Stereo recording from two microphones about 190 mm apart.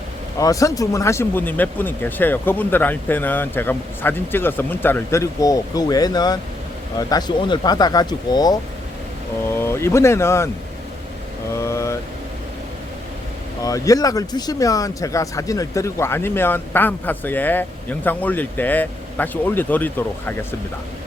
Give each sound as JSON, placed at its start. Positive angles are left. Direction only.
{"t": 0.3, "sound": "speech", "side_deg": 15}
{"t": 9.6, "sound": "speech", "side_deg": 15}
{"t": 11.5, "sound": "vehicle", "side_deg": 15}
{"t": 13.6, "sound": "speech", "side_deg": 20}